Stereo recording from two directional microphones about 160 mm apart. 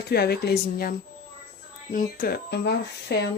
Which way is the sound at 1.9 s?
60° left (ahead or behind).